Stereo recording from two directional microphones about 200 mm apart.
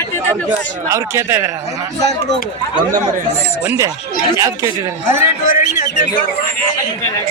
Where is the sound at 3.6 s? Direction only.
10° right (ahead or behind).